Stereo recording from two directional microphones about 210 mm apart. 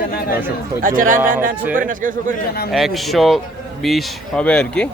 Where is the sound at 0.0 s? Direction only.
45° left (ahead or behind).